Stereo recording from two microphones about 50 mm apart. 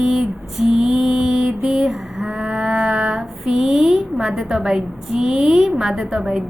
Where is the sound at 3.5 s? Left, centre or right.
Centre.